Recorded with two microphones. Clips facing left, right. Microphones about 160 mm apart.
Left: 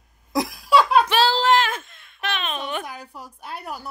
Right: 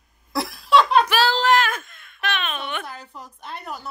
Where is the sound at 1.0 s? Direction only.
25° left (ahead or behind).